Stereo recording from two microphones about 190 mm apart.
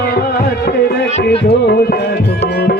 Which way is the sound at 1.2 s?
60° left (ahead or behind).